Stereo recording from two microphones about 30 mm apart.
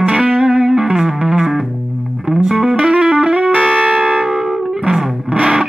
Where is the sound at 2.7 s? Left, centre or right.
Right.